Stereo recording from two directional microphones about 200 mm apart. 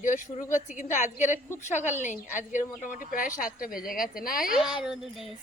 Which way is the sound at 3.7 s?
Centre (ahead or behind).